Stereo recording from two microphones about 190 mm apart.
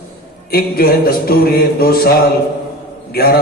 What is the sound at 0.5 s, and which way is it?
Speech, 50° left (ahead or behind).